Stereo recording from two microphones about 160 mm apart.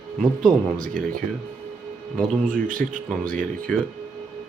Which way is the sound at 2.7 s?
55° right (ahead or behind).